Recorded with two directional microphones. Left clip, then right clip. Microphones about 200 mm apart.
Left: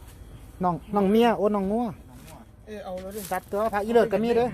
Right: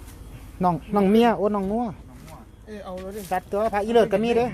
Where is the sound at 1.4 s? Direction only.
15° left (ahead or behind).